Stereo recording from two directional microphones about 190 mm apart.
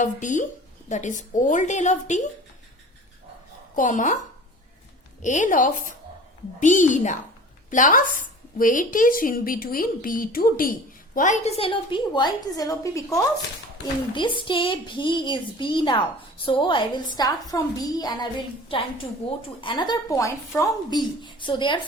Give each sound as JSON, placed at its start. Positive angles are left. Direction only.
{"t": 0.0, "sound": "a woman's voice", "side_deg": 40}
{"t": 3.8, "sound": "a woman's voice", "side_deg": 40}
{"t": 5.2, "sound": "a woman's voice", "side_deg": 40}